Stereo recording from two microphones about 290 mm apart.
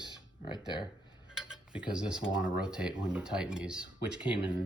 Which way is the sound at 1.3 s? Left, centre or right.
Centre.